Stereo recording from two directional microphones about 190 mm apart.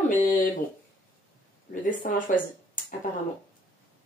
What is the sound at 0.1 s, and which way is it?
Speech, 45° left (ahead or behind).